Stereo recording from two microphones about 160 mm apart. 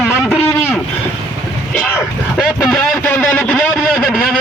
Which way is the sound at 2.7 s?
15° left (ahead or behind).